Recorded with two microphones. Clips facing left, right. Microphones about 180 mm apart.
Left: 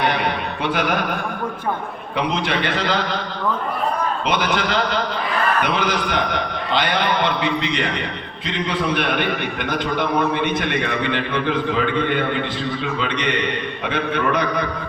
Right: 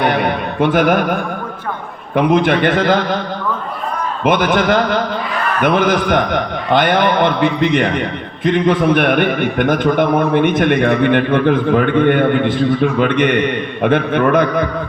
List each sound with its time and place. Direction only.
0.0 s a sound: 50° right (ahead or behind)
2.1 s a man's voice: 50° right (ahead or behind)
4.2 s a man's voice: 50° right (ahead or behind)